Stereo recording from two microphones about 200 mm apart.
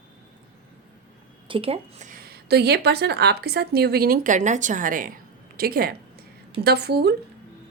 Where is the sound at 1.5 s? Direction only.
30° right (ahead or behind).